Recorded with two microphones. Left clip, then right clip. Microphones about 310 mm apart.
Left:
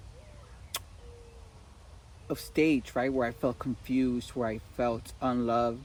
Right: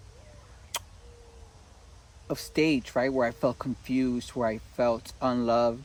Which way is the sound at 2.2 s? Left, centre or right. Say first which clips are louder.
Right 1 dB; right.